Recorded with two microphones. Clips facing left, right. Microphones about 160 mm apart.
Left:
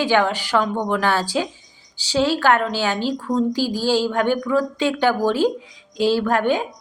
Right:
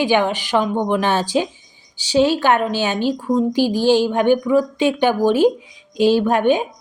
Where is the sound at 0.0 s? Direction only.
15° right (ahead or behind).